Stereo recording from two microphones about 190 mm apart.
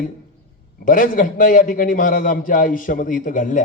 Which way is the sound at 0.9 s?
45° left (ahead or behind).